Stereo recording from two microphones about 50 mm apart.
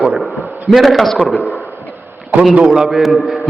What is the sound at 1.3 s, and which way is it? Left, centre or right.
Speech, left.